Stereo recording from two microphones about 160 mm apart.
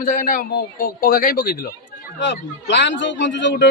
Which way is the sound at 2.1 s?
90° left.